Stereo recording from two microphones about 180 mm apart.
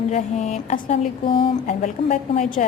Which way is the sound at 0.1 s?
40° left (ahead or behind).